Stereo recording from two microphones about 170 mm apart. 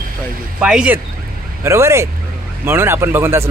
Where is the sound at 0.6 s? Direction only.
5° right (ahead or behind).